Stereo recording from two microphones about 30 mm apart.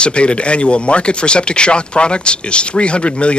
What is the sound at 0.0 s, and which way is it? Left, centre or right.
Speech, left.